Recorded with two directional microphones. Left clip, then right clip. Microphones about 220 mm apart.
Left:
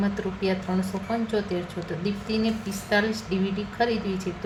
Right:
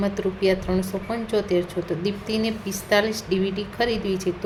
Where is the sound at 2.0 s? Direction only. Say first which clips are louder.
Left 1 dB; 25° right (ahead or behind).